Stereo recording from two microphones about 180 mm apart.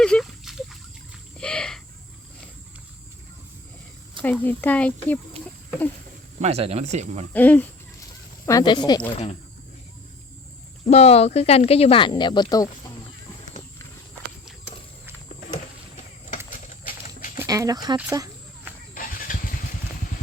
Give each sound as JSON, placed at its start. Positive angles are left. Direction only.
{"t": 0.0, "sound": "a sound", "side_deg": 5}
{"t": 4.2, "sound": "speech", "side_deg": 10}
{"t": 6.4, "sound": "speech", "side_deg": -35}
{"t": 7.3, "sound": "speech", "side_deg": 10}
{"t": 8.4, "sound": "speech", "side_deg": 20}
{"t": 10.8, "sound": "speech", "side_deg": 35}
{"t": 16.5, "sound": "clip-clop", "side_deg": 50}
{"t": 17.3, "sound": "speech", "side_deg": -15}
{"t": 17.9, "sound": "a sound", "side_deg": -15}
{"t": 18.9, "sound": "vehicle", "side_deg": 50}